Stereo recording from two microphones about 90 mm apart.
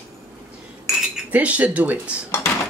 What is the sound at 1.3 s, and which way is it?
Speech, 15° right (ahead or behind).